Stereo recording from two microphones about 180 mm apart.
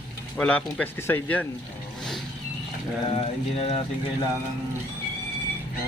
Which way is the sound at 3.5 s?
35° left (ahead or behind).